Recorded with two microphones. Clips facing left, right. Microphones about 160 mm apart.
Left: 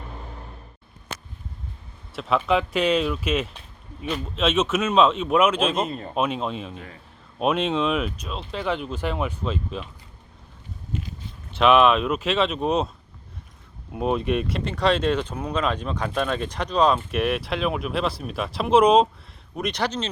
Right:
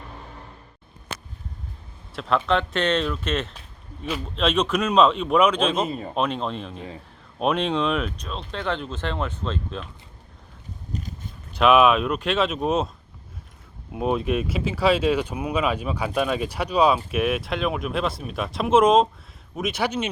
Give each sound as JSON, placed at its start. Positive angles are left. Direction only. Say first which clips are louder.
{"t": 2.1, "sound": "speech", "louder": "even", "side_deg": 5}
{"t": 6.1, "sound": "speech", "louder": "left 1 dB", "side_deg": 5}
{"t": 10.9, "sound": "a sound", "louder": "left 2 dB", "side_deg": -40}
{"t": 11.5, "sound": "speech", "louder": "even", "side_deg": 0}
{"t": 13.9, "sound": "speech", "louder": "even", "side_deg": 0}